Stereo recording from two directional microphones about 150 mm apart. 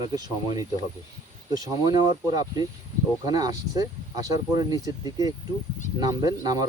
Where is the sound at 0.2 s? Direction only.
25° right (ahead or behind).